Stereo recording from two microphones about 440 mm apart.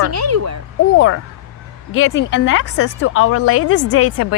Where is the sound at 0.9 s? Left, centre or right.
Left.